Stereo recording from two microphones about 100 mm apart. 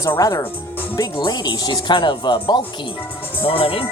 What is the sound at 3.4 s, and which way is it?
Speech, 65° left (ahead or behind).